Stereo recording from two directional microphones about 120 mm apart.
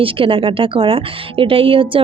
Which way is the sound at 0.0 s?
50° right (ahead or behind).